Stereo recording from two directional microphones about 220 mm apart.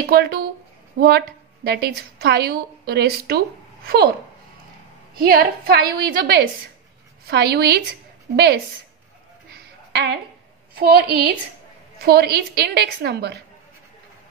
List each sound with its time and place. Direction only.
0.0 s a woman's voice: 45° right (ahead or behind)
5.1 s a woman's voice: 45° right (ahead or behind)
10.8 s a woman's voice: 45° right (ahead or behind)